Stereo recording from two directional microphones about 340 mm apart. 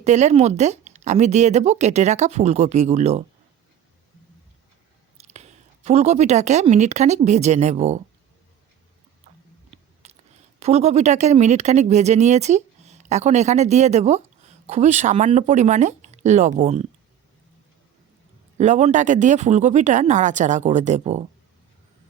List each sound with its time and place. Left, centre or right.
0.0 s speech: centre
5.1 s speech: centre
10.0 s clicking: centre
10.6 s speech: centre
18.5 s speech: centre